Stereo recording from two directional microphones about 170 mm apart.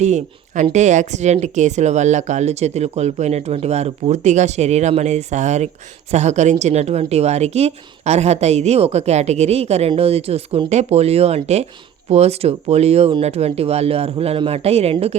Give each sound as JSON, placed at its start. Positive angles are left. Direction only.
{"t": 0.0, "sound": "a woman's voice", "side_deg": -45}